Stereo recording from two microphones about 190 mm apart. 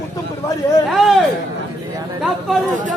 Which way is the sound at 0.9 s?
Centre (ahead or behind).